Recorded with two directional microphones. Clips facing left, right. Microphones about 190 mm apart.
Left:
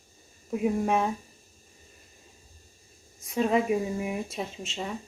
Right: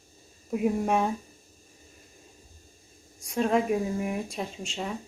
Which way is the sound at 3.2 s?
Centre (ahead or behind).